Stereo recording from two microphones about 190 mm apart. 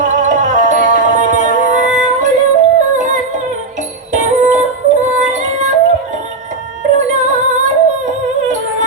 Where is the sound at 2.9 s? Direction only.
40° right (ahead or behind).